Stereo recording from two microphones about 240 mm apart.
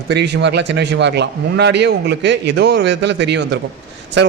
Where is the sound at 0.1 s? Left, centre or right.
Right.